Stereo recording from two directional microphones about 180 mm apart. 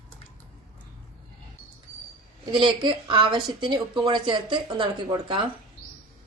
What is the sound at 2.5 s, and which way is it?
Speech, 25° right (ahead or behind).